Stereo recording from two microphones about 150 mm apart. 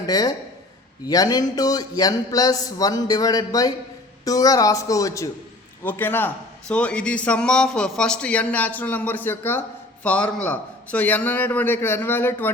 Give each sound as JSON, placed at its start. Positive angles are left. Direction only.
{"t": 0.1, "sound": "a man's voice", "side_deg": 25}